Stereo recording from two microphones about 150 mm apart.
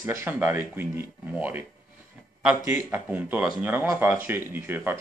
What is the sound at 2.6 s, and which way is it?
Speech, 15° right (ahead or behind).